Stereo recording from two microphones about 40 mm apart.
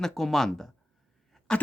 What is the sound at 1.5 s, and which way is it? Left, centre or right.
Speech, left.